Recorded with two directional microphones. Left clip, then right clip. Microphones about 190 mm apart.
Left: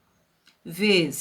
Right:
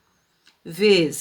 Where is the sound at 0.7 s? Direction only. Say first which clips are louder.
Right 4 dB; 35° right (ahead or behind).